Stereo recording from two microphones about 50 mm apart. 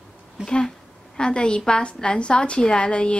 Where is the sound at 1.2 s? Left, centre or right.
Centre.